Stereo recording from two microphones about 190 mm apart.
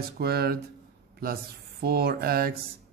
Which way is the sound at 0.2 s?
55° right (ahead or behind).